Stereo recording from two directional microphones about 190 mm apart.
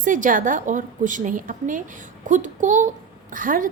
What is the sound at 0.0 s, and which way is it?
A child's voice, 45° right (ahead or behind).